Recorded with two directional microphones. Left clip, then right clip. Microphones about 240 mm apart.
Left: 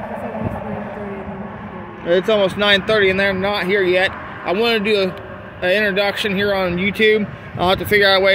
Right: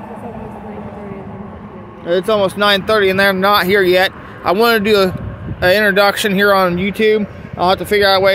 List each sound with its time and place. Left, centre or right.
2.0 s speech: centre